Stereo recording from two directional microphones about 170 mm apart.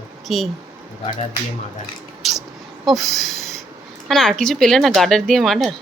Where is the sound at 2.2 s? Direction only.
Centre (ahead or behind).